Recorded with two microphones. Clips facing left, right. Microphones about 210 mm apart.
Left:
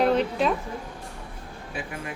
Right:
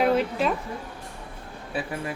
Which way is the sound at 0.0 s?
5° right (ahead or behind).